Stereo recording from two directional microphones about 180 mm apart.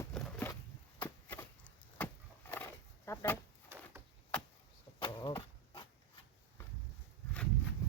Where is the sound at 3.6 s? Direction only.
15° right (ahead or behind).